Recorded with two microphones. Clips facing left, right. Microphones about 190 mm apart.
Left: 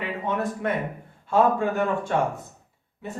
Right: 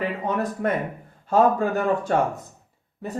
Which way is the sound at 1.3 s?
40° right (ahead or behind).